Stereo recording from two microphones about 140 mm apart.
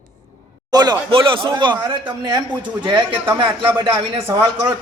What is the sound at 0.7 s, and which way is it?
A man's voice, 30° right (ahead or behind).